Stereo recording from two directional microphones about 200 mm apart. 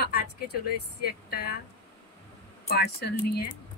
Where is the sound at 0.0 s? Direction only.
50° left (ahead or behind).